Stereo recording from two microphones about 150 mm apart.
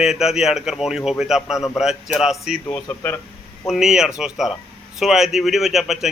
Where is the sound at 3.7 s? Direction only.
5° right (ahead or behind).